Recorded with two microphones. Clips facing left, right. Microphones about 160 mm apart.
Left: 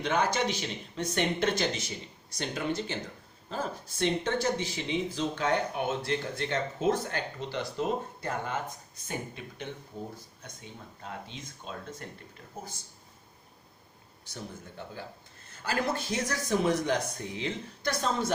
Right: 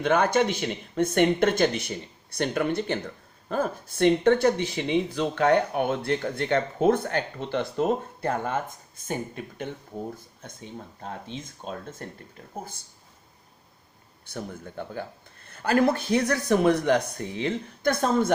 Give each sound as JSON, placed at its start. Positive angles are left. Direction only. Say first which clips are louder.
{"t": 0.0, "sound": "speech", "louder": "right 6 dB", "side_deg": -55}
{"t": 11.0, "sound": "speech", "louder": "right 4 dB", "side_deg": -40}
{"t": 14.3, "sound": "speech", "louder": "right 6 dB", "side_deg": -55}